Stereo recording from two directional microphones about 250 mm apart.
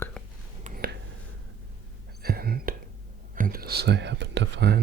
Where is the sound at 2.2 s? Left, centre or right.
Right.